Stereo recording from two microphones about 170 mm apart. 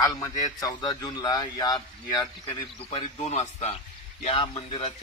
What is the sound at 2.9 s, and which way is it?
Speech, 40° left (ahead or behind).